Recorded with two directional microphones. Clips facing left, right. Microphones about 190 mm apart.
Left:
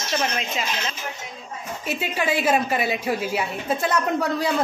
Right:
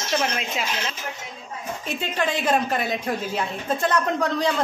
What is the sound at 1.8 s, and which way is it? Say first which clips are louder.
A woman's voice: left 1 dB; 5° left (ahead or behind).